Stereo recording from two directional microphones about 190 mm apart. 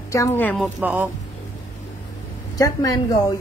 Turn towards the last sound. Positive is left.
turn(degrees=20)  # may be behind; listen again after turning